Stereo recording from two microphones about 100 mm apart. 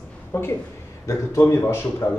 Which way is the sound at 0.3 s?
25° left (ahead or behind).